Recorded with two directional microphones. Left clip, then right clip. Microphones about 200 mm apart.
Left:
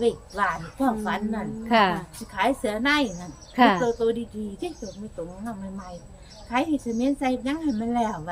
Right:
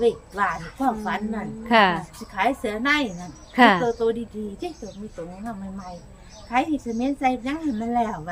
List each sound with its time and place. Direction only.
0.0 s a woman's voice: centre (ahead or behind)
1.6 s a woman's voice: 15° right (ahead or behind)
2.3 s a woman's voice: centre (ahead or behind)
3.5 s speech: 20° right (ahead or behind)
3.8 s a woman's voice: centre (ahead or behind)
6.5 s a woman's voice: centre (ahead or behind)